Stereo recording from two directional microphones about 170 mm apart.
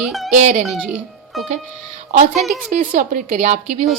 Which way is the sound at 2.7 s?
45° right (ahead or behind).